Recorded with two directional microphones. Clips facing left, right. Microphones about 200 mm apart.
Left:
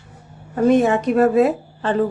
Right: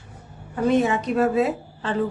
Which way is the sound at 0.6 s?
50° left (ahead or behind).